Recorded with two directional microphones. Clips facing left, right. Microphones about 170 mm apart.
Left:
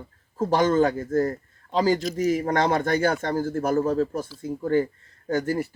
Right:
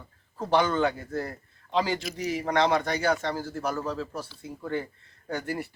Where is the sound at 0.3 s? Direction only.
40° left (ahead or behind).